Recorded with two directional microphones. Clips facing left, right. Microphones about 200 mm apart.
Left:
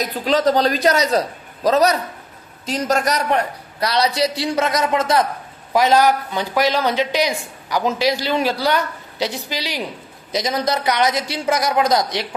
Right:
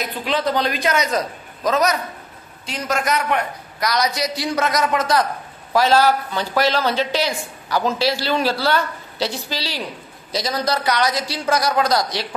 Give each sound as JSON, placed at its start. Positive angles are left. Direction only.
{"t": 0.0, "sound": "a man's voice", "side_deg": 40}